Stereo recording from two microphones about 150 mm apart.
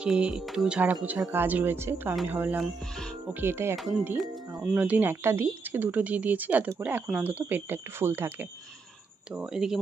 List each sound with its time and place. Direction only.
0.0 s speech: 5° right (ahead or behind)
2.8 s speech: 5° left (ahead or behind)
3.3 s speech: 15° right (ahead or behind)
3.8 s speech: 5° right (ahead or behind)
4.4 s music: 25° right (ahead or behind)
4.6 s speech: 10° right (ahead or behind)